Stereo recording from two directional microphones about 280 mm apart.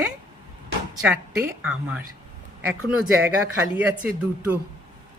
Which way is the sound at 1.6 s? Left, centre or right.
Centre.